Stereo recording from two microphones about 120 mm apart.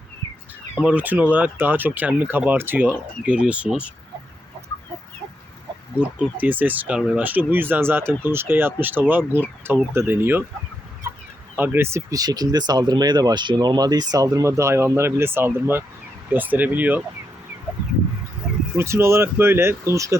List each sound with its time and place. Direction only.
0.8 s speech: 10° right (ahead or behind)
6.0 s speech: 10° right (ahead or behind)
11.5 s speech: 15° right (ahead or behind)
18.8 s speech: 20° right (ahead or behind)